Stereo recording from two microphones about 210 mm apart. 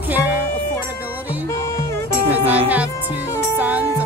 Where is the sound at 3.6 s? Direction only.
5° right (ahead or behind).